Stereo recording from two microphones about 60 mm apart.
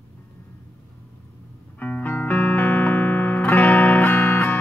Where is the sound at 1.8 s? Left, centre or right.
Left.